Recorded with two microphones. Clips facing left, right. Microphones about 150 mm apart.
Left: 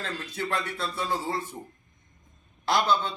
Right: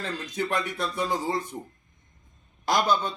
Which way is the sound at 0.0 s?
15° right (ahead or behind).